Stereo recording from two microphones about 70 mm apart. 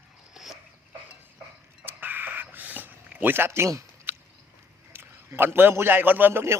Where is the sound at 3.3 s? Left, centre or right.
Right.